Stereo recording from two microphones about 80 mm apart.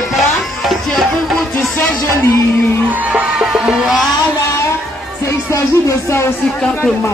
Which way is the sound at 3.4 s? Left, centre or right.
Centre.